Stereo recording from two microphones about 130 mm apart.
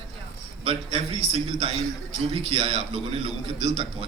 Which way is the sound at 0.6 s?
45° right (ahead or behind).